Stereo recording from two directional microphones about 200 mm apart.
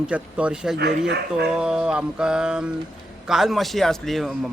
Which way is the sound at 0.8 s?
60° right (ahead or behind).